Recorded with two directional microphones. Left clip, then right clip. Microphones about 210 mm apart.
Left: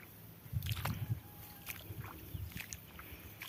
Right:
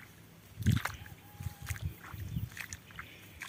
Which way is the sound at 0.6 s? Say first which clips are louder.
Right 6 dB; 10° right (ahead or behind).